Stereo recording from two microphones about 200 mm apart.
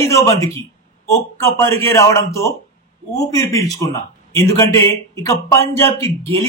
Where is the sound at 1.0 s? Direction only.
15° left (ahead or behind).